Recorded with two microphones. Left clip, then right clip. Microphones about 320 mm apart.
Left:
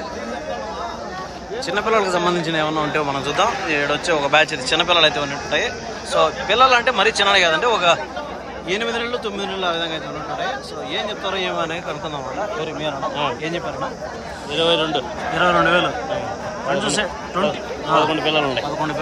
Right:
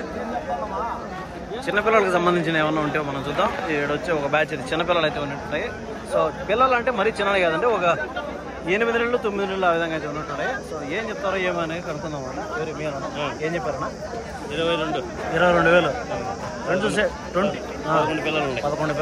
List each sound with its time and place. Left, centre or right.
1.7 s speech: centre
11.0 s speech: centre
14.5 s speech: left
15.3 s a man's voice: centre
18.1 s speech: left